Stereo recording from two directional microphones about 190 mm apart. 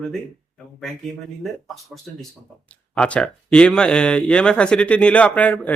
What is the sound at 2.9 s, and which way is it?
Speech, 5° left (ahead or behind).